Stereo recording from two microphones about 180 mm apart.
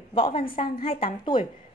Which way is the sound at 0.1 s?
30° left (ahead or behind).